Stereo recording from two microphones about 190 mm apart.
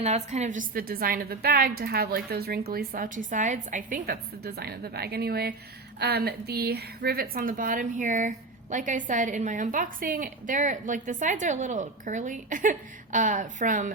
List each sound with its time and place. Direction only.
0.0 s a woman's voice: 35° right (ahead or behind)